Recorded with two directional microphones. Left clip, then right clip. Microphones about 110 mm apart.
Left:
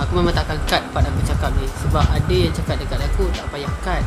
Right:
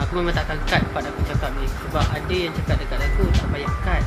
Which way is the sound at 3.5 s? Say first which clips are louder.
Left 1 dB; 35° left (ahead or behind).